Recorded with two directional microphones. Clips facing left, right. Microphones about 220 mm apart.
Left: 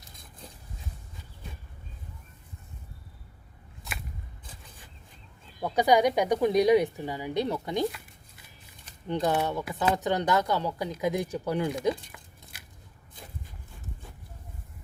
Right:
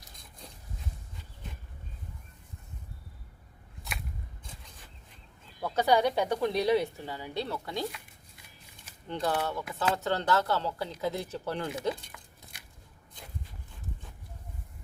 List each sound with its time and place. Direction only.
5.5 s speech: 15° left (ahead or behind)
9.0 s speech: 20° left (ahead or behind)
12.0 s a sound: 5° left (ahead or behind)